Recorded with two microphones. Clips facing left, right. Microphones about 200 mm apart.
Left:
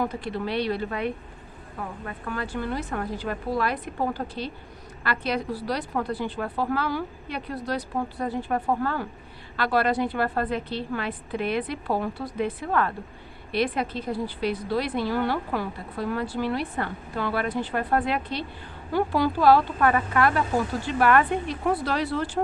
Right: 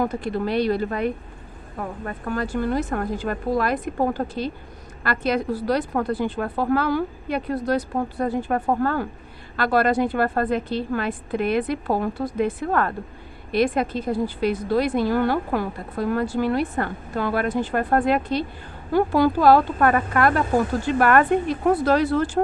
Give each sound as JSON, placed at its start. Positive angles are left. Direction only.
{"t": 0.0, "sound": "a woman's voice", "side_deg": -45}